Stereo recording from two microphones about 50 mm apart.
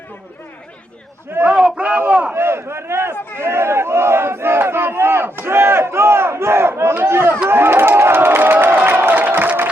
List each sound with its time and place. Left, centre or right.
1.5 s a man's voice: centre
2.3 s battle cry: right
6.9 s speech: right
7.5 s crowd: right